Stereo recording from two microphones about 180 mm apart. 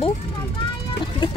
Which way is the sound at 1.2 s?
25° left (ahead or behind).